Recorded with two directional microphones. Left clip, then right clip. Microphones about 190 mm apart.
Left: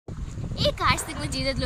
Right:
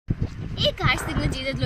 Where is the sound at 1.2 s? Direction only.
25° left (ahead or behind).